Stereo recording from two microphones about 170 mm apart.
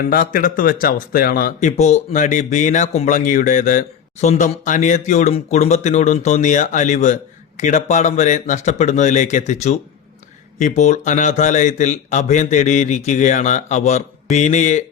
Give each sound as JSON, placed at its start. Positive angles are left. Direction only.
{"t": 0.1, "sound": "speech", "side_deg": 55}
{"t": 1.7, "sound": "speech", "side_deg": 40}